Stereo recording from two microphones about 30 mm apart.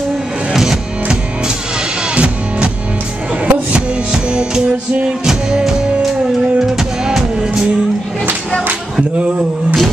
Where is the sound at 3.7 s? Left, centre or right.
Right.